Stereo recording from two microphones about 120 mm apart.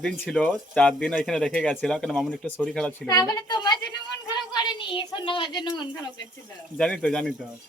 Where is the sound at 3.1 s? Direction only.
35° left (ahead or behind).